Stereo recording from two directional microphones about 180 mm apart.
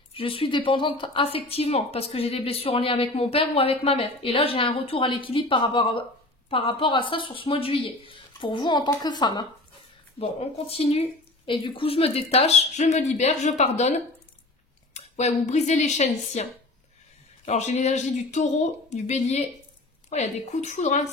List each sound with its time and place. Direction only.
0.1 s a woman's voice: 30° left (ahead or behind)
10.1 s a woman's voice: 35° left (ahead or behind)
15.0 s a sound: 40° left (ahead or behind)
15.4 s a woman's voice: 40° left (ahead or behind)
17.5 s a woman's voice: 40° left (ahead or behind)